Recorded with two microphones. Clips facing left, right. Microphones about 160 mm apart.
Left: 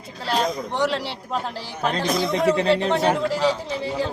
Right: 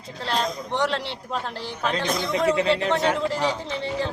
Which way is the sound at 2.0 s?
5° left (ahead or behind).